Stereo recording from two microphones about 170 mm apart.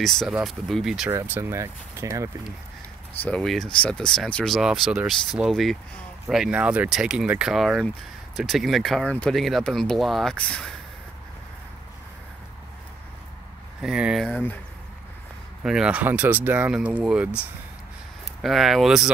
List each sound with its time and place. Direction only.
0.0 s speech: centre (ahead or behind); by 2.3 s 20° right (ahead or behind)
3.2 s speech: 5° left (ahead or behind)
13.7 s speech: 5° right (ahead or behind)
14.3 s speech: 10° left (ahead or behind)
15.6 s speech: 5° right (ahead or behind)
18.4 s speech: centre (ahead or behind)